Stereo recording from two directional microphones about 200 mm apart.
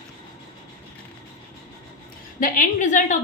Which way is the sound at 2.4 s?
40° left (ahead or behind).